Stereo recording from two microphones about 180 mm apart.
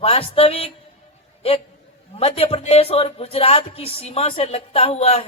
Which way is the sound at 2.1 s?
35° left (ahead or behind).